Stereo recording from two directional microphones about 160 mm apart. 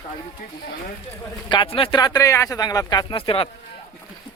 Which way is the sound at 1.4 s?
30° left (ahead or behind).